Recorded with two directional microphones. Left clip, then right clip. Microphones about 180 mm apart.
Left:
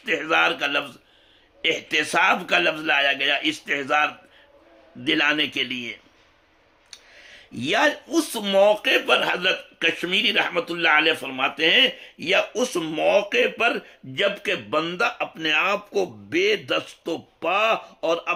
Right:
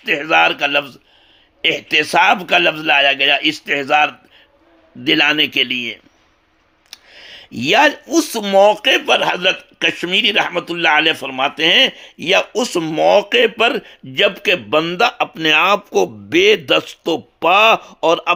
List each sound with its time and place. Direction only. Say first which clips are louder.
0.0 s speech: right 7 dB; 30° right (ahead or behind)
6.9 s speech: right 8 dB; 40° right (ahead or behind)